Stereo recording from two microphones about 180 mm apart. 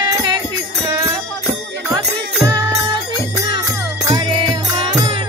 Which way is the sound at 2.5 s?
25° right (ahead or behind).